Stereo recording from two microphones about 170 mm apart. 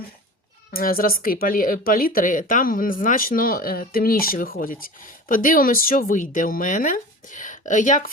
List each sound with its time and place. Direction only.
0.7 s speech: 60° left (ahead or behind)